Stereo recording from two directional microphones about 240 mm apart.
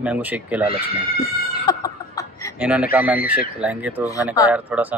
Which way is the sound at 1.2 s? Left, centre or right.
Centre.